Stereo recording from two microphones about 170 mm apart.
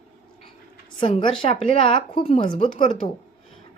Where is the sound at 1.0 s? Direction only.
30° left (ahead or behind).